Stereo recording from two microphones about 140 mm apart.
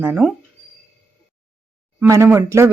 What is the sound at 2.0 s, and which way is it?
Speech, 15° right (ahead or behind).